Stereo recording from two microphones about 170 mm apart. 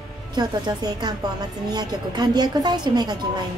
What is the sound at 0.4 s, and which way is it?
A woman's voice, 25° right (ahead or behind).